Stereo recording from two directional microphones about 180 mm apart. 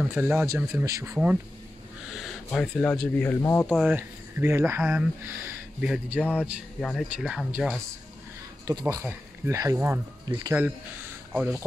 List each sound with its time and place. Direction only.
0.0 s speech: 10° right (ahead or behind)
2.1 s speech: 5° left (ahead or behind)
3.7 s speech: 10° right (ahead or behind)
6.8 s speech: 5° left (ahead or behind)
8.6 s speech: 15° right (ahead or behind)
11.3 s speech: 5° right (ahead or behind)